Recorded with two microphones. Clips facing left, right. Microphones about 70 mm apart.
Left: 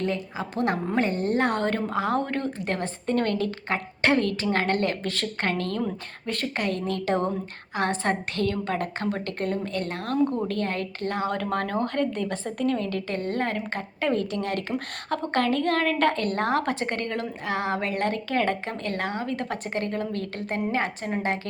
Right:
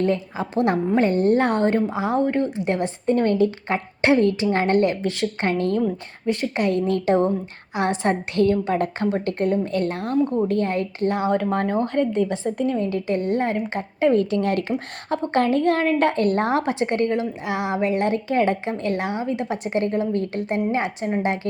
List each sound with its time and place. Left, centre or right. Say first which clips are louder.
0.0 s a woman's voice: right 6 dB; right
1.9 s a woman's voice: right 4 dB; centre
14.1 s speech: right 6 dB; right
14.7 s a woman's voice: right 4 dB; centre